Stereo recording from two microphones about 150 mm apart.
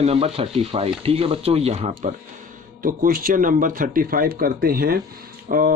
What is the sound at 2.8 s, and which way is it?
Speech, 70° right (ahead or behind).